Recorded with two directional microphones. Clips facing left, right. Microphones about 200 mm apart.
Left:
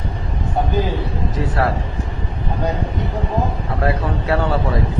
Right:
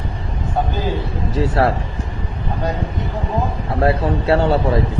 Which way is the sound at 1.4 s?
25° right (ahead or behind).